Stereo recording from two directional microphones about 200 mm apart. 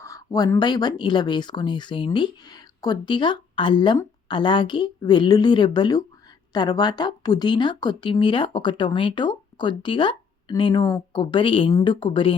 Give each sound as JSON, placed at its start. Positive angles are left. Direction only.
{"t": 0.0, "sound": "speech", "side_deg": 15}